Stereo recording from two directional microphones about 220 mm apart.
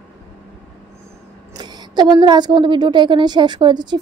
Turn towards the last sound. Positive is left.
turn(degrees=-20)  # may be behind; listen again after turning